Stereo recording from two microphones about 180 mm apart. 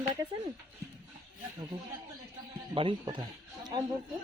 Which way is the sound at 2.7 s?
30° right (ahead or behind).